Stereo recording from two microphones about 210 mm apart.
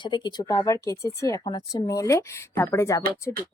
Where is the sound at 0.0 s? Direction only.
20° left (ahead or behind).